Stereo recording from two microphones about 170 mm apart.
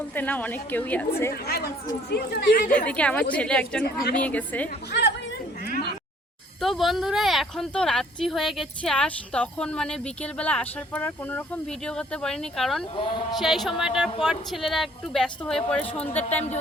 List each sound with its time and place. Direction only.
0.1 s a woman's voice: 10° left (ahead or behind)
1.3 s speech: 65° left (ahead or behind)
2.6 s a woman's voice: 10° left (ahead or behind)
4.9 s chatter: 85° left
6.6 s speech: centre (ahead or behind)
12.8 s speech: 30° left (ahead or behind)
13.3 s a woman's voice: centre (ahead or behind)